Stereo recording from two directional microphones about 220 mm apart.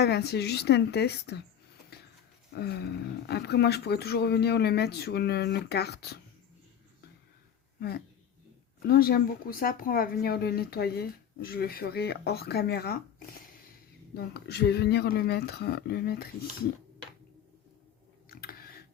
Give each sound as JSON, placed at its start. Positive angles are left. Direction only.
{"t": 0.0, "sound": "speech", "side_deg": 50}
{"t": 2.6, "sound": "speech", "side_deg": 45}
{"t": 7.8, "sound": "speech", "side_deg": 45}
{"t": 18.3, "sound": "a sound", "side_deg": 40}